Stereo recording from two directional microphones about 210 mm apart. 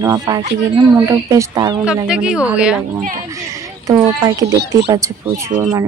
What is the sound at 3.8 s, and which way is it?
Speech, 15° right (ahead or behind).